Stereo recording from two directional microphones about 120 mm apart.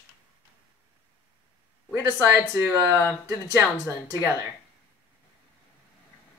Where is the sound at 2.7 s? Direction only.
25° right (ahead or behind).